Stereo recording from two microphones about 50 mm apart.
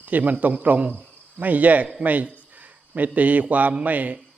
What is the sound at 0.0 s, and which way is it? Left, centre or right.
Speech, right.